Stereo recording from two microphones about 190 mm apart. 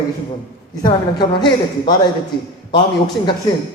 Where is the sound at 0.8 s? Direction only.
20° left (ahead or behind).